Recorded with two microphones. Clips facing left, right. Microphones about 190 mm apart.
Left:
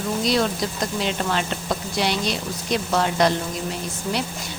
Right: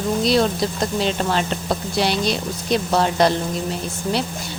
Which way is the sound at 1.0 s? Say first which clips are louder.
Right 3 dB; 35° right (ahead or behind).